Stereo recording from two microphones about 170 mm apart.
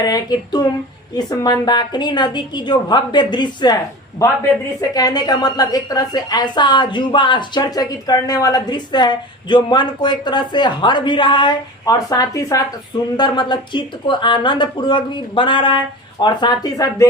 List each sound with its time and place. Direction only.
0.0 s a woman's voice: 20° left (ahead or behind)
4.8 s a woman's voice: 20° left (ahead or behind)